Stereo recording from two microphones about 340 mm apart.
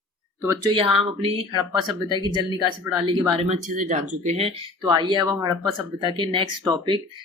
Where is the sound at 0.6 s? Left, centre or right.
Centre.